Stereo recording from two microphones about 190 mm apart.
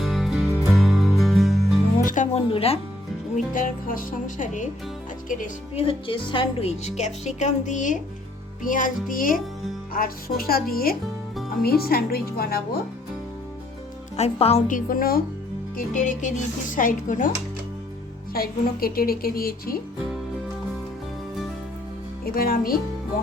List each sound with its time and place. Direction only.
0.0 s music: centre (ahead or behind)
2.0 s music: 40° left (ahead or behind)
3.3 s a woman's voice: 45° left (ahead or behind)
5.8 s a woman's voice: 25° left (ahead or behind); by 12.6 s 55° left (ahead or behind)
14.2 s speech: 30° left (ahead or behind)
14.7 s a woman's voice: 45° left (ahead or behind)
22.4 s a woman's voice: 50° left (ahead or behind)